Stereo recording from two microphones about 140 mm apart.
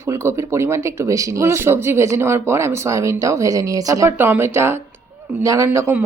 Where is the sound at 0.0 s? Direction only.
20° right (ahead or behind).